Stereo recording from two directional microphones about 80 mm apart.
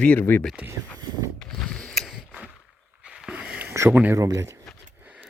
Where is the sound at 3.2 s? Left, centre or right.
Centre.